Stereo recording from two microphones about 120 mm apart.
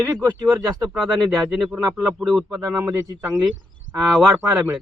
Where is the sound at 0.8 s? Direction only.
Centre (ahead or behind).